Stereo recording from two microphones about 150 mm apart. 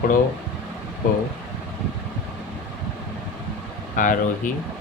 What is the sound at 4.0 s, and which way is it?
Speech, 60° left (ahead or behind).